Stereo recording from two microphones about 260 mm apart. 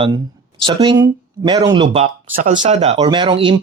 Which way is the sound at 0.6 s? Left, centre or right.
Centre.